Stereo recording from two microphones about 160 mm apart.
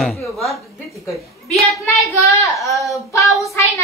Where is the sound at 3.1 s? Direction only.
20° left (ahead or behind).